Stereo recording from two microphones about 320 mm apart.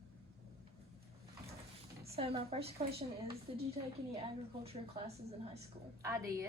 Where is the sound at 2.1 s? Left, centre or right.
Centre.